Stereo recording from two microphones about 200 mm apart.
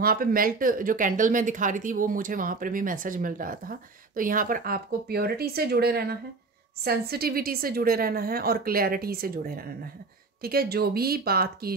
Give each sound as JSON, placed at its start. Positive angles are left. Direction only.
{"t": 0.0, "sound": "speech", "side_deg": -45}